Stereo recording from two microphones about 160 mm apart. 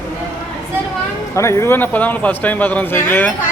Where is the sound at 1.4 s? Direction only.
15° left (ahead or behind).